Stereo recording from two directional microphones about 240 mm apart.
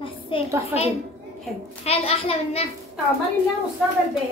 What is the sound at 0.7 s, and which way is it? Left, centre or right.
Speech, centre.